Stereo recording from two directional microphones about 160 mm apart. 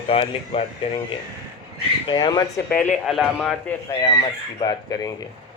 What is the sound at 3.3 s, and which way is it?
Speech, 10° left (ahead or behind).